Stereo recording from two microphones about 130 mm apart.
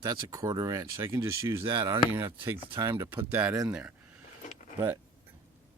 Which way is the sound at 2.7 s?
35° right (ahead or behind).